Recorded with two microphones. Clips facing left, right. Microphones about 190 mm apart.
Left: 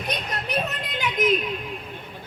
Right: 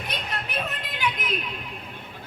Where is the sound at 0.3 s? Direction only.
45° left (ahead or behind).